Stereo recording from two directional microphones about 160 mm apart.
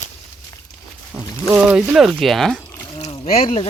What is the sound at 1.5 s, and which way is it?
Speech, 5° right (ahead or behind).